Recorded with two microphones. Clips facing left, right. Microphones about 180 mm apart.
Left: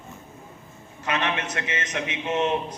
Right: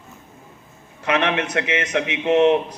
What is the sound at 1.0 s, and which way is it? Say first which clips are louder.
A man's voice: right 6 dB; 65° right (ahead or behind).